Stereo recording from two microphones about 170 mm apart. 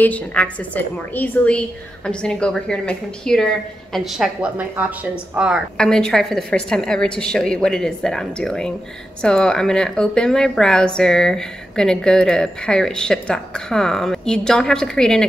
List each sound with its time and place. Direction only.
0.0 s a woman's voice: 10° left (ahead or behind)